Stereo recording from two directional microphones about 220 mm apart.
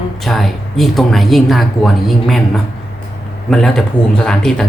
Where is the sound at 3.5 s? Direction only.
Centre (ahead or behind).